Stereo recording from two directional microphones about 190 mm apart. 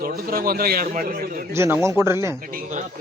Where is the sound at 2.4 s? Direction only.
50° right (ahead or behind).